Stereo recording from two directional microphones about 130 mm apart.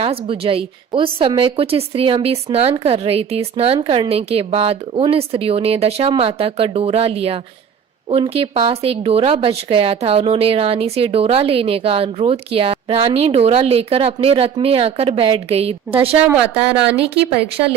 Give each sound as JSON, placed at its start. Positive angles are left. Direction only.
{"t": 0.0, "sound": "a woman's voice", "side_deg": -45}
{"t": 16.1, "sound": "speech", "side_deg": -10}